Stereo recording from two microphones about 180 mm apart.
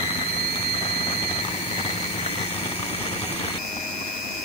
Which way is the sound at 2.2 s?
35° left (ahead or behind).